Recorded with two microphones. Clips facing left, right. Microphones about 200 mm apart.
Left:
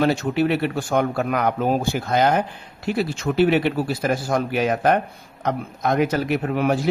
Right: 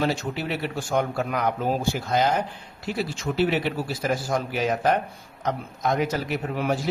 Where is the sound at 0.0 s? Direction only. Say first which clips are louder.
Left 7 dB; 60° left (ahead or behind).